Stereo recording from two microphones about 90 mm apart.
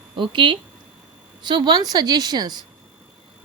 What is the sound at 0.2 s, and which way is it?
Speech, 65° right (ahead or behind).